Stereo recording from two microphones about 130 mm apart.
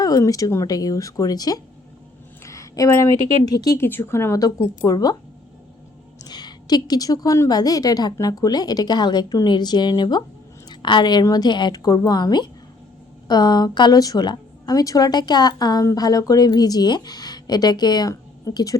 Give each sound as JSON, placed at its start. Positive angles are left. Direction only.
{"t": 0.0, "sound": "a woman's voice", "side_deg": 25}
{"t": 3.8, "sound": "speech", "side_deg": 15}
{"t": 6.2, "sound": "a woman's voice", "side_deg": 35}